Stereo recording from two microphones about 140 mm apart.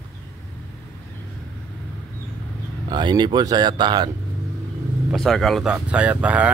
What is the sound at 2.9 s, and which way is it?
Speech, 30° right (ahead or behind).